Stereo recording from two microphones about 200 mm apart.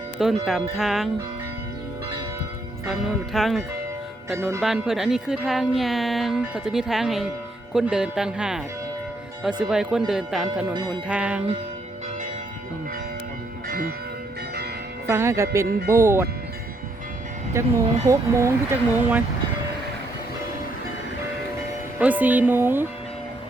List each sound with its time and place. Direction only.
0.2 s speech: centre (ahead or behind)
2.8 s speech: centre (ahead or behind)
4.6 s speech: centre (ahead or behind)
13.7 s church bell: 50° right (ahead or behind)
15.1 s speech: 15° right (ahead or behind)
17.6 s speech: 15° right (ahead or behind)
21.9 s speech: 10° right (ahead or behind)